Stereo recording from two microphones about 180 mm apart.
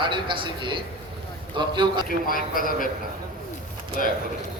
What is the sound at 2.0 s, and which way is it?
Speech, 50° left (ahead or behind).